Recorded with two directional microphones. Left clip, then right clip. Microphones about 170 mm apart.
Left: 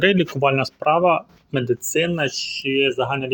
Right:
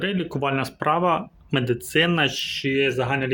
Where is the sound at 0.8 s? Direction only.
15° left (ahead or behind).